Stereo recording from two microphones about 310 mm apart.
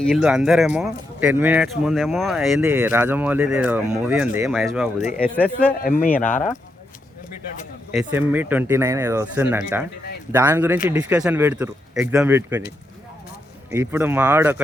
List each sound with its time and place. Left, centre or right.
0.0 s speech: centre
5.8 s speech: left
7.5 s speech: left
7.9 s speech: centre
13.7 s speech: centre